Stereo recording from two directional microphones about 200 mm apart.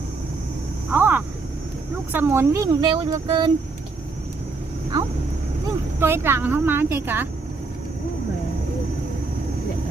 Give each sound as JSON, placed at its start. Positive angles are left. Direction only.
{"t": 0.9, "sound": "a sound", "side_deg": -10}
{"t": 2.1, "sound": "speech", "side_deg": -10}
{"t": 5.6, "sound": "speech", "side_deg": -10}